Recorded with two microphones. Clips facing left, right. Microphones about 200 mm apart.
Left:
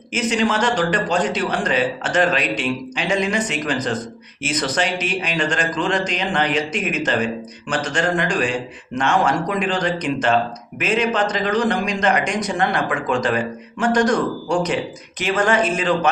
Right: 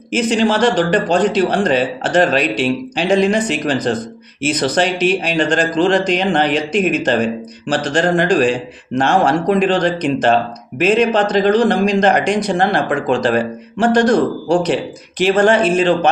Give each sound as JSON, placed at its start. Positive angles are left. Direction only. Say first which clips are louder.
{"t": 0.1, "sound": "speech", "louder": "right 5 dB", "side_deg": -30}